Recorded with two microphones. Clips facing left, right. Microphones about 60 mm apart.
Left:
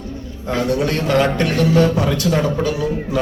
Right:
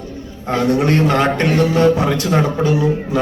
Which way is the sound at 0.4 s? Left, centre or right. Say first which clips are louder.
Right 3 dB; right.